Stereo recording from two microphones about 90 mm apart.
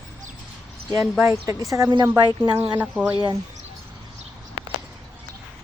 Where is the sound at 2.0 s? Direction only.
55° right (ahead or behind).